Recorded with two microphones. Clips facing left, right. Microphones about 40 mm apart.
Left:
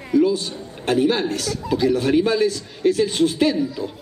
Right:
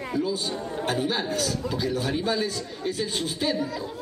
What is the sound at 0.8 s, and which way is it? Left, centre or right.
A man's voice, left.